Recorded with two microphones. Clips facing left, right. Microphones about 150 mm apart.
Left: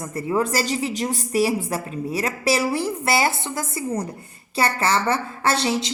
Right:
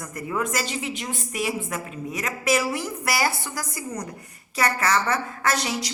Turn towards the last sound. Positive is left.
turn(degrees=25)  # may be behind; listen again after turning